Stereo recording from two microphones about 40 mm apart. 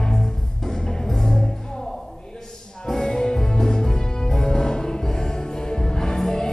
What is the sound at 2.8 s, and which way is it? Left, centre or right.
Music, centre.